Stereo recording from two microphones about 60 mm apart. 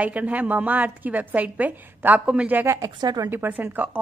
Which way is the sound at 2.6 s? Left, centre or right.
Right.